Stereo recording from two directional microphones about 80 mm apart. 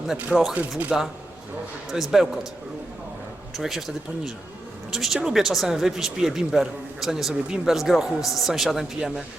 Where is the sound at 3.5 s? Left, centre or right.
Centre.